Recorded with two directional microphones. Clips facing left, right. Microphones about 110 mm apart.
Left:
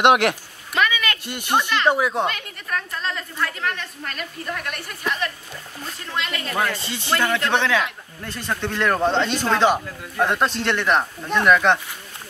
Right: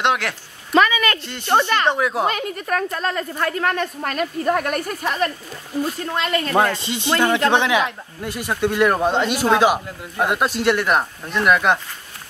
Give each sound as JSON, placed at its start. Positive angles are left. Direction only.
{"t": 0.0, "sound": "speech", "side_deg": 20}
{"t": 0.7, "sound": "a sound", "side_deg": -40}
{"t": 1.2, "sound": "speech", "side_deg": 10}
{"t": 1.6, "sound": "a woman's voice", "side_deg": -50}
{"t": 1.9, "sound": "speech", "side_deg": 0}
{"t": 2.2, "sound": "a woman's voice", "side_deg": -40}
{"t": 6.8, "sound": "speech", "side_deg": -20}